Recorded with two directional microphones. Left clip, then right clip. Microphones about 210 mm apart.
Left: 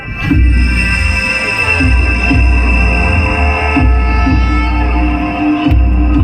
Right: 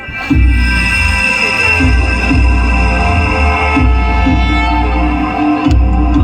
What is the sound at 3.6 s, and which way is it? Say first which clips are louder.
Music: right 1 dB; 15° right (ahead or behind).